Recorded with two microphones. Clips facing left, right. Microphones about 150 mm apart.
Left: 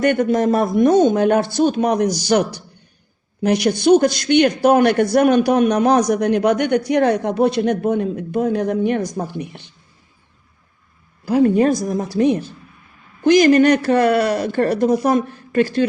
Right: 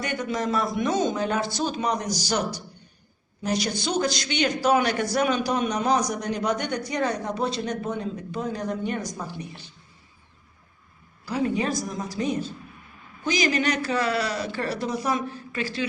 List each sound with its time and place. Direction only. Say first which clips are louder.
0.0 s a man's voice: left 12 dB; 55° left (ahead or behind)
11.3 s a man's voice: left 11 dB; 50° left (ahead or behind)
13.2 s speech: left 13 dB; 55° left (ahead or behind)